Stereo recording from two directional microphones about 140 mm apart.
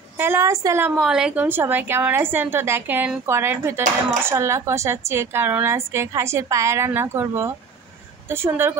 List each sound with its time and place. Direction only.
0.2 s a woman's voice: 15° right (ahead or behind)
0.9 s a woman's voice: 5° right (ahead or behind)